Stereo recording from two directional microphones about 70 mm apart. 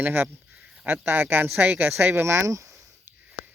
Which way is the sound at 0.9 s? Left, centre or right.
Right.